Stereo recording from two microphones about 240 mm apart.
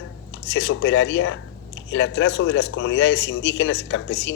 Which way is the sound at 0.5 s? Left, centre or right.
Left.